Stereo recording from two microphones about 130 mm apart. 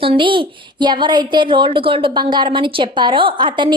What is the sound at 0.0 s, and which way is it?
A woman's voice, 40° right (ahead or behind).